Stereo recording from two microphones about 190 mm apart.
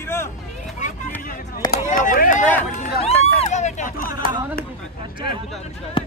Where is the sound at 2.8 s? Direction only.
35° left (ahead or behind).